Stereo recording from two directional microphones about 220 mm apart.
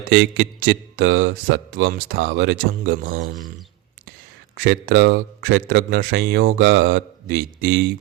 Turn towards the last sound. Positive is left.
turn(degrees=-50)  # may be behind; listen again after turning